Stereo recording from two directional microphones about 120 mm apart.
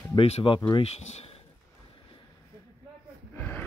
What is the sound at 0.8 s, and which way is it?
Speech, 60° left (ahead or behind).